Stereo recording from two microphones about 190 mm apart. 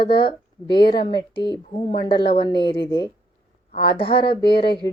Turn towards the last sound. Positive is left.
turn(degrees=25)  # may be behind; listen again after turning